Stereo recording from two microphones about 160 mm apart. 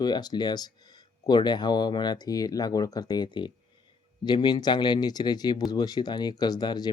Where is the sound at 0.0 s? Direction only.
25° left (ahead or behind).